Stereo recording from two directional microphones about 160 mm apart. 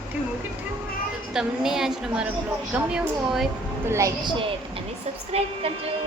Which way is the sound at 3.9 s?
20° right (ahead or behind).